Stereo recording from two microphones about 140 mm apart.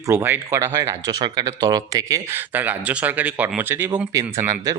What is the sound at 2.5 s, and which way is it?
A man's voice, 10° right (ahead or behind).